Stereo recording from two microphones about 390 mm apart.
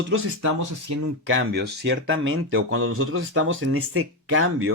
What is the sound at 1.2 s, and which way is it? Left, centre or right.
Speech, right.